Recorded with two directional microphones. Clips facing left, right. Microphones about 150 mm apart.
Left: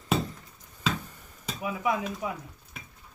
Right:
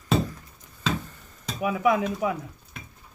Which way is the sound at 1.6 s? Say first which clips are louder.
Right 6 dB; 75° right (ahead or behind).